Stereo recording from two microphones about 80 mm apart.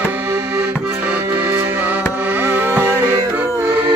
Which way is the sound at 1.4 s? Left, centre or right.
Right.